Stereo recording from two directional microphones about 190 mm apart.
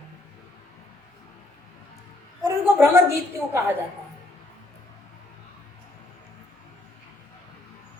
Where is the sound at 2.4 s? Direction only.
15° right (ahead or behind).